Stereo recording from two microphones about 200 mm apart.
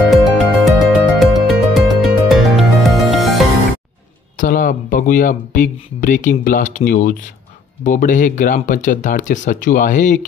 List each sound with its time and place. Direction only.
0.1 s music: centre (ahead or behind)
4.4 s speech: 40° left (ahead or behind)